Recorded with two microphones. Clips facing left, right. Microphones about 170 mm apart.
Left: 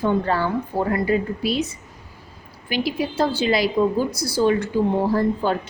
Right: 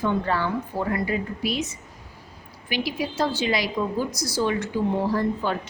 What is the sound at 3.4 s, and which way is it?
A woman's voice, 30° left (ahead or behind).